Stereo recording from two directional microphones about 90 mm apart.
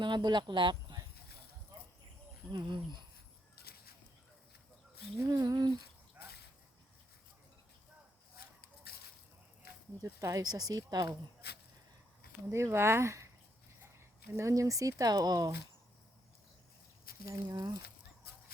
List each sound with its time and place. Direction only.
0.0 s speech: 55° right (ahead or behind)
2.5 s speech: 60° right (ahead or behind)
5.2 s speech: 40° right (ahead or behind)
10.0 s speech: 35° right (ahead or behind)
12.5 s speech: 30° right (ahead or behind)
14.3 s speech: 30° right (ahead or behind)
17.3 s speech: 50° right (ahead or behind)